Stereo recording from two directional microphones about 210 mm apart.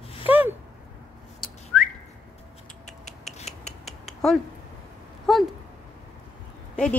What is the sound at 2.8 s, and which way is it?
Scissors, 35° left (ahead or behind).